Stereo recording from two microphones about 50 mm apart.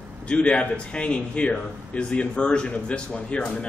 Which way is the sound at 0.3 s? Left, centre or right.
Left.